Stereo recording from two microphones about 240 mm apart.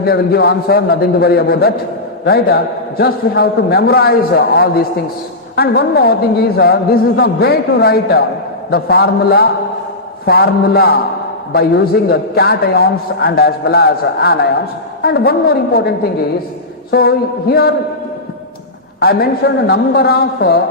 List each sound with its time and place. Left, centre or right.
0.0 s a man's voice: left
7.2 s a man's voice: left
16.9 s a man's voice: left
18.9 s a man's voice: left